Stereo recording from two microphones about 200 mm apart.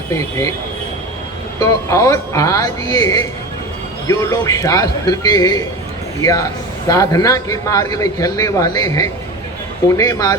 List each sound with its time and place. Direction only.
1.5 s a man's voice: 15° left (ahead or behind)